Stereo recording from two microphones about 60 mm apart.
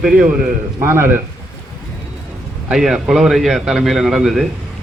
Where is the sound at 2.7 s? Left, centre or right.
Centre.